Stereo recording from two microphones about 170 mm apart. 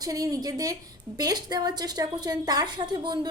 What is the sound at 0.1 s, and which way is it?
A woman's voice, 20° right (ahead or behind).